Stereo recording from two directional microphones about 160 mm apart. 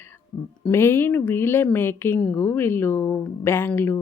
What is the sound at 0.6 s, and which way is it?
A woman's voice, 15° left (ahead or behind).